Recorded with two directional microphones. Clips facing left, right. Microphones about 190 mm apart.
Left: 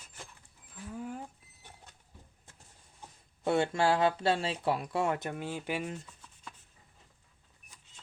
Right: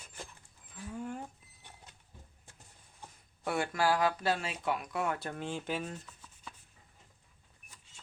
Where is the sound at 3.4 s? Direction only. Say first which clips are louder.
Left 4 dB; 25° left (ahead or behind).